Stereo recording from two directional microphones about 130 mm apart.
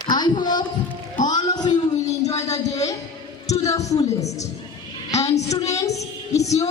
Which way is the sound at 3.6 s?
25° left (ahead or behind).